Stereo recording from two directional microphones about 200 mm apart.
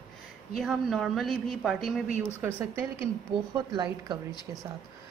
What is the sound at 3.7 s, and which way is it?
Speech, 20° right (ahead or behind).